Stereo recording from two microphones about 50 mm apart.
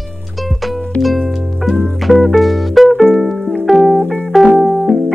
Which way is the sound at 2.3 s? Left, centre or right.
Centre.